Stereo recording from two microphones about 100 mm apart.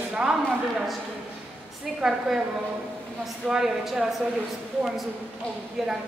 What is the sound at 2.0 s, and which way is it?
Speech, 5° right (ahead or behind).